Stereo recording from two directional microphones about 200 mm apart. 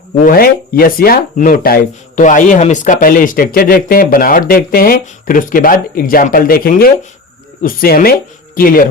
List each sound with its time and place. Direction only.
0.3 s speech: 45° left (ahead or behind)